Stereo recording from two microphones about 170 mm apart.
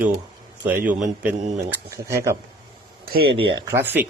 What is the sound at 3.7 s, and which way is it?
Speech, 15° right (ahead or behind).